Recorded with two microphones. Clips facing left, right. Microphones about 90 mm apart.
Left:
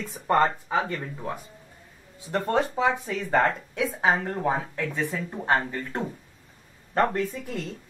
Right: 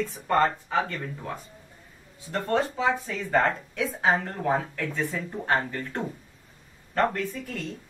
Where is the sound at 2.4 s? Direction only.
20° left (ahead or behind).